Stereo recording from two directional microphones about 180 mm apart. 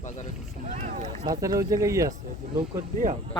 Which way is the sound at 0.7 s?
50° right (ahead or behind).